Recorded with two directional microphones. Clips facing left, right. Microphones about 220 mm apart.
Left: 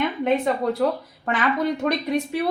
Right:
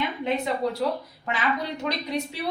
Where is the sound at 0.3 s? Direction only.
55° left (ahead or behind).